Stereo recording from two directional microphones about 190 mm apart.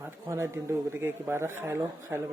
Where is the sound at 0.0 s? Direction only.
15° right (ahead or behind).